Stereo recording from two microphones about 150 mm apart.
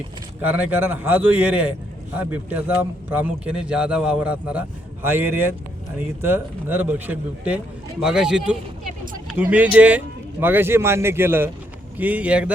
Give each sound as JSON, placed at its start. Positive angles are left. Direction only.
{"t": 0.4, "sound": "a man's voice", "side_deg": -10}